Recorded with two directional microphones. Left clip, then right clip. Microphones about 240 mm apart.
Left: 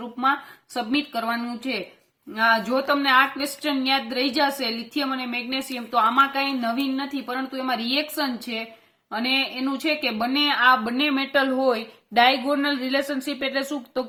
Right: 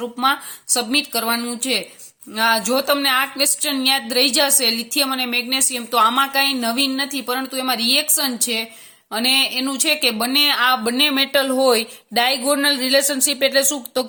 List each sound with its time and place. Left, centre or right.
0.2 s speech: right